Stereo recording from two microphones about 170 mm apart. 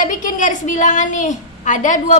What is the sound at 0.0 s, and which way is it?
A woman's voice, 45° left (ahead or behind).